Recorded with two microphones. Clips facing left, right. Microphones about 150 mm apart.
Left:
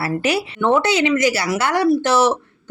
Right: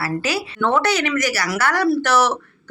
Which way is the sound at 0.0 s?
25° left (ahead or behind).